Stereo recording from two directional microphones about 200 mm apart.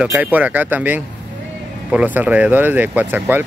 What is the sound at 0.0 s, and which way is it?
Speech, 10° right (ahead or behind).